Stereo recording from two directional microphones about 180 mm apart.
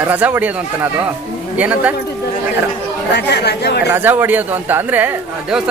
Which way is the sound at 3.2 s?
65° left (ahead or behind).